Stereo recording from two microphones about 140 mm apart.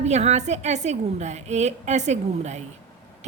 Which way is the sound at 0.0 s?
55° right (ahead or behind).